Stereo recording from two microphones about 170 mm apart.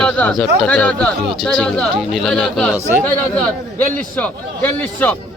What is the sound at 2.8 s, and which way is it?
Speech, 10° left (ahead or behind).